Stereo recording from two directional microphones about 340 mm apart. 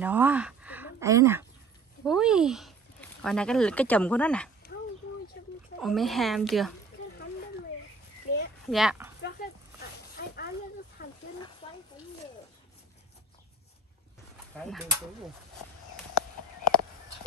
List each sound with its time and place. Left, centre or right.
0.0 s speech: centre
5.8 s speech: centre
8.6 s speech: centre
9.2 s a sound: left
11.6 s a sound: centre
14.5 s speech: centre